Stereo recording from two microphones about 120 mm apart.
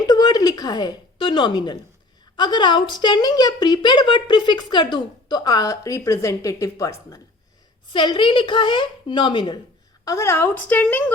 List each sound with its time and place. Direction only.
0.1 s a woman's voice: 35° left (ahead or behind)
7.9 s a woman's voice: 45° left (ahead or behind)
10.0 s a woman's voice: 25° left (ahead or behind)